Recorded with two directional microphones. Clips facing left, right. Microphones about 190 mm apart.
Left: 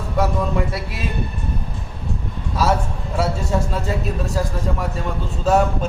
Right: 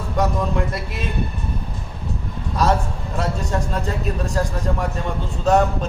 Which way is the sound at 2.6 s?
5° left (ahead or behind).